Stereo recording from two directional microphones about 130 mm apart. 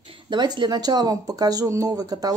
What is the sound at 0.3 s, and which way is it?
Speech, 35° right (ahead or behind).